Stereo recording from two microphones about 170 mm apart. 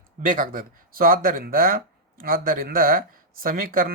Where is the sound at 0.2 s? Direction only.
55° right (ahead or behind).